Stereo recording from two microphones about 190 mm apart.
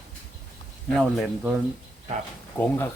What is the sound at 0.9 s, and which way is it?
Speech, centre (ahead or behind).